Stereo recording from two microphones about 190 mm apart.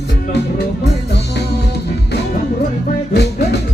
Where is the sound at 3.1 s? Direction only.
60° left (ahead or behind).